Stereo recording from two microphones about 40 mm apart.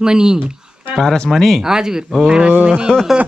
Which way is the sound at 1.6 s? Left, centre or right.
Centre.